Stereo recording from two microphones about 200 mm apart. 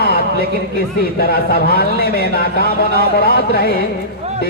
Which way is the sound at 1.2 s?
50° left (ahead or behind).